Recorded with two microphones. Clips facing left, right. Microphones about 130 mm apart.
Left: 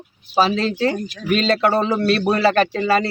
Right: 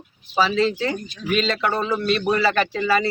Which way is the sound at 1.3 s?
35° left (ahead or behind).